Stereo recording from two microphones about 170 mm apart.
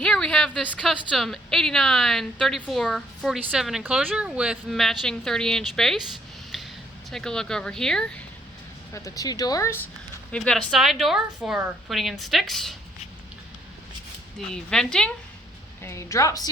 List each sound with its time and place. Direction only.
0.0 s a woman's voice: 5° left (ahead or behind)
7.1 s a woman's voice: 5° left (ahead or behind)
8.9 s speech: 20° left (ahead or behind)
10.3 s a woman's voice: 5° left (ahead or behind)
14.5 s a woman's voice: 5° left (ahead or behind)
15.8 s a woman's voice: 15° left (ahead or behind)